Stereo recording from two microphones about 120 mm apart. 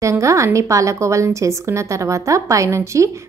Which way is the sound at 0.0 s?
25° right (ahead or behind).